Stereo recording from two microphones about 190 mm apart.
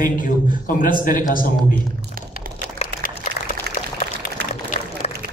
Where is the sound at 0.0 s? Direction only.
45° left (ahead or behind).